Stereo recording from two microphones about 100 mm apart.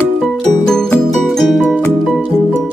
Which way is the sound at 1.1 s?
Centre (ahead or behind).